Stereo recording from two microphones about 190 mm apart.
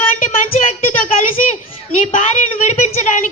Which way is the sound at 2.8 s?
40° left (ahead or behind).